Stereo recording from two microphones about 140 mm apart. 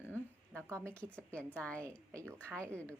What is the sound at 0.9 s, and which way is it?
A woman's voice, 10° left (ahead or behind).